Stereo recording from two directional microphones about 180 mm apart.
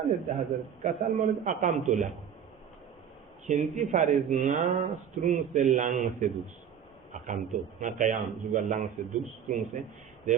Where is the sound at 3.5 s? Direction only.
40° right (ahead or behind).